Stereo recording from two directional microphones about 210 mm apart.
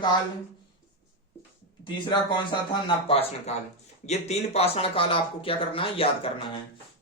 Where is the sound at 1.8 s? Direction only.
20° left (ahead or behind).